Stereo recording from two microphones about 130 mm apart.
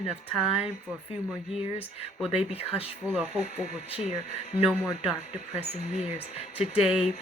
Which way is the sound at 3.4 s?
55° left (ahead or behind).